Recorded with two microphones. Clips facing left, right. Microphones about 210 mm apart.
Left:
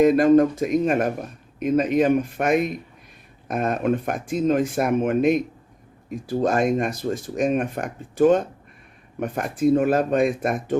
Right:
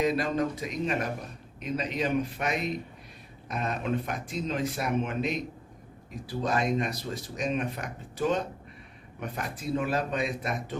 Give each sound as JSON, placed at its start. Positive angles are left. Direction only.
{"t": 0.0, "sound": "speech", "side_deg": 50}